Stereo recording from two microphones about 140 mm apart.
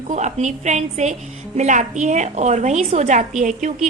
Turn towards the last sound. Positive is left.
turn(degrees=-60)  # may be behind; listen again after turning